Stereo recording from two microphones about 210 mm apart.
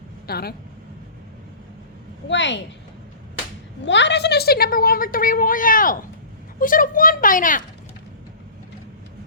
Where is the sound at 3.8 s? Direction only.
55° left (ahead or behind); by 7.6 s 40° left (ahead or behind).